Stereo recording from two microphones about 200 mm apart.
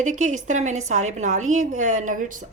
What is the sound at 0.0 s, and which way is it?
A woman's voice, 40° right (ahead or behind).